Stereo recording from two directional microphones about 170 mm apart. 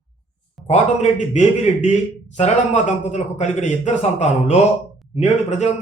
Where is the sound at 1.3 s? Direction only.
40° left (ahead or behind).